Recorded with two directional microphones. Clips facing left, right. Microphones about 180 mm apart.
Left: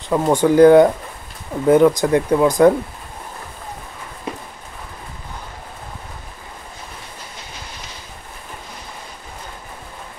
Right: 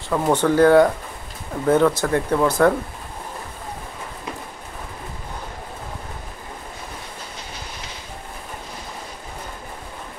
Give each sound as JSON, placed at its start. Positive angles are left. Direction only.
{"t": 0.1, "sound": "speech", "side_deg": 10}